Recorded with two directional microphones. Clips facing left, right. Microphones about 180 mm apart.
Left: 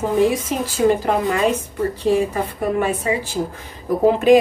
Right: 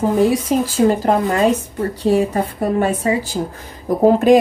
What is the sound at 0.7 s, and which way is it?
A woman's voice, 40° right (ahead or behind).